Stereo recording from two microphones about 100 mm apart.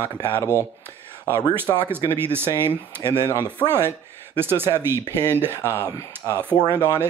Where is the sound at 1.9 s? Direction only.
20° right (ahead or behind).